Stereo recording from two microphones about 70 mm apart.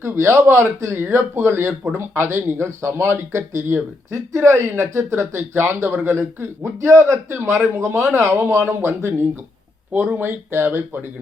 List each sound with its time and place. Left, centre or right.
0.0 s speech: right